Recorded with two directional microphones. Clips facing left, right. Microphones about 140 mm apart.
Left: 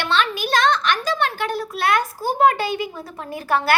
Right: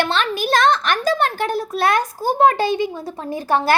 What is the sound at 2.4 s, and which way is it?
Speech, 30° right (ahead or behind).